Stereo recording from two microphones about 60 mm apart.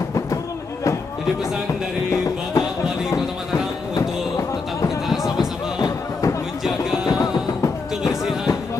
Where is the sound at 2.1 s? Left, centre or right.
Left.